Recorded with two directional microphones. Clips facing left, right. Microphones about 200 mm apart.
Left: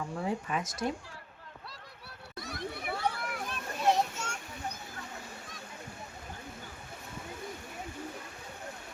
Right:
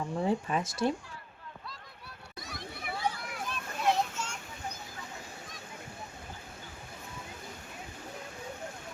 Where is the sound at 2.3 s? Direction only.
65° left (ahead or behind).